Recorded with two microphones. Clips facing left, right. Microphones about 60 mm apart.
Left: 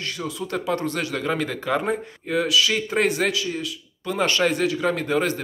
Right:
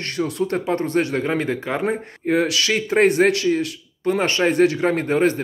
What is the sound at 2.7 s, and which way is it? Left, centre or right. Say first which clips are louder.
Speech: right 6 dB; right.